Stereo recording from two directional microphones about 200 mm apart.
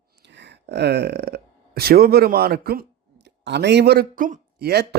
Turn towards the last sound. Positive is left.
turn(degrees=-50)  # may be behind; listen again after turning